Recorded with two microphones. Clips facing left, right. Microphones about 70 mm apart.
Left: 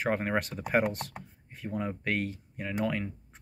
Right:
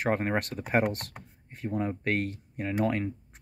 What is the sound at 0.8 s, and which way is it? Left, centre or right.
Speech, right.